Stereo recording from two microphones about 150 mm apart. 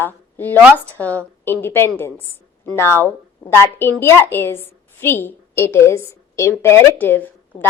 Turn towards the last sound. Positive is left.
turn(degrees=15)  # may be behind; listen again after turning